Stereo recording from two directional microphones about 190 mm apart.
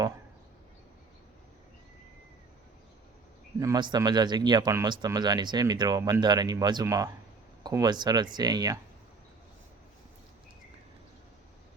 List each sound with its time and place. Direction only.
3.6 s speech: 20° right (ahead or behind)